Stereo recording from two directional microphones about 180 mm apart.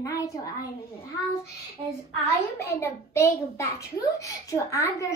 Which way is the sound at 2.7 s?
15° left (ahead or behind).